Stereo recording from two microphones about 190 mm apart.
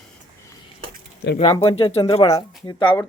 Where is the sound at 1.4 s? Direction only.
30° left (ahead or behind).